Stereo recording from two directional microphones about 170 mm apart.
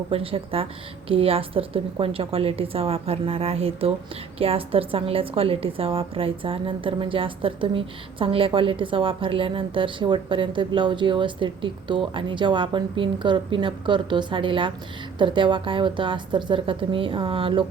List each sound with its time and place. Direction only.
0.1 s a woman's voice: 35° right (ahead or behind)